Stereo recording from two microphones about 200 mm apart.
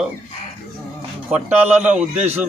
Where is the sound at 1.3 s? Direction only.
10° right (ahead or behind).